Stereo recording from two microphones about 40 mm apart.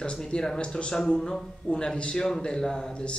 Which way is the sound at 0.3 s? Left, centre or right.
Centre.